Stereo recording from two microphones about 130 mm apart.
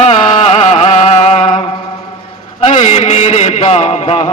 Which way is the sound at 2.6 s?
65° left (ahead or behind).